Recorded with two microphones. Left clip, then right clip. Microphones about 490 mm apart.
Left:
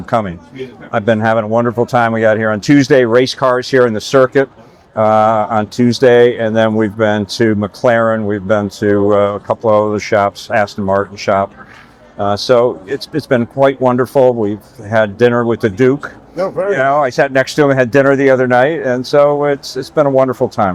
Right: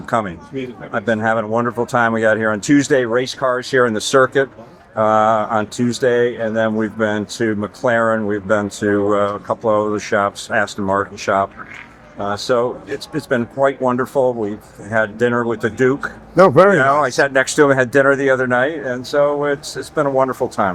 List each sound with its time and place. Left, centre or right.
0.9 s speech: left